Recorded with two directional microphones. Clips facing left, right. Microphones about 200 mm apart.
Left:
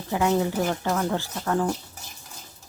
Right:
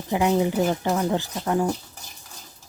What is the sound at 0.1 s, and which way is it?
A woman's voice, 15° right (ahead or behind).